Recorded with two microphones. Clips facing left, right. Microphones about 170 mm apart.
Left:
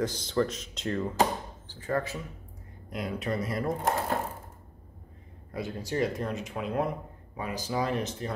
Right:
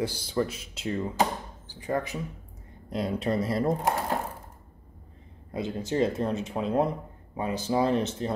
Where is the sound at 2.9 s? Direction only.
30° right (ahead or behind).